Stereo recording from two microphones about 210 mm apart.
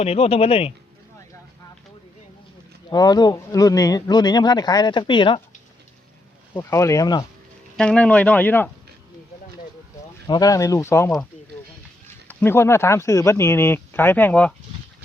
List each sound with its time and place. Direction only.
0.0 s speech: 30° left (ahead or behind)
2.9 s speech: 20° left (ahead or behind)
6.6 s speech: 15° left (ahead or behind)
7.8 s speech: 5° left (ahead or behind)
10.2 s speech: 20° left (ahead or behind)